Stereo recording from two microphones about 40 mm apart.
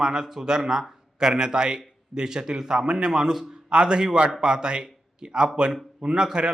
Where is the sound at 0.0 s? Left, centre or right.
Centre.